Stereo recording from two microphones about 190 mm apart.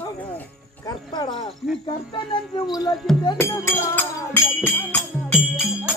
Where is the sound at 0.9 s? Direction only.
20° left (ahead or behind).